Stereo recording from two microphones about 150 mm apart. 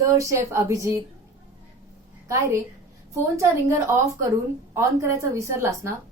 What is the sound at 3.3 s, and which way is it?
A woman's voice, 20° right (ahead or behind).